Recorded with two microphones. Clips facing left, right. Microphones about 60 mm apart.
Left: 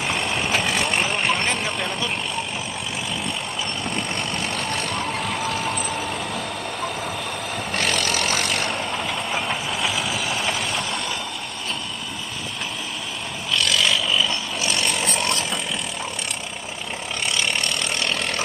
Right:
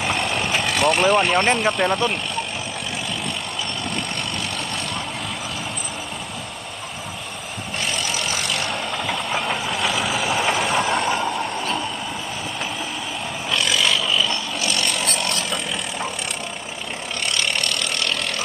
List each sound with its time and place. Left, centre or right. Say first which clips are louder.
0.1 s vehicle: left 1 dB; centre
1.0 s speech: right 6 dB; right
7.8 s vehicle: left 2 dB; left
9.0 s vehicle: right 2 dB; centre
10.1 s vehicle: right 4 dB; right
10.7 s mechanisms: right 7 dB; right
13.5 s a sound: even; centre
13.9 s vehicle: right 1 dB; centre